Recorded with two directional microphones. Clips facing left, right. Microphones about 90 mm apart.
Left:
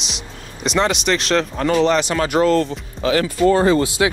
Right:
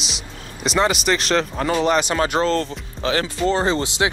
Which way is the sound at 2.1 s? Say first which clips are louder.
Left 3 dB; 30° right (ahead or behind).